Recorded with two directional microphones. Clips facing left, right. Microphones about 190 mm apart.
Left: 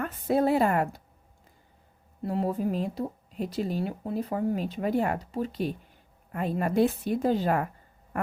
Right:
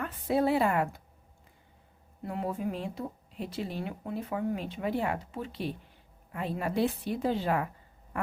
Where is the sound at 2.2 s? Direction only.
35° left (ahead or behind).